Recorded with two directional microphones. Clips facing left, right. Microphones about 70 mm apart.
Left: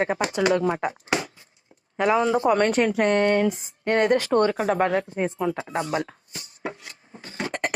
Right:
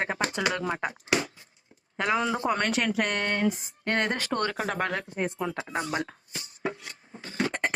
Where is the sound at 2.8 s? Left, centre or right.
Left.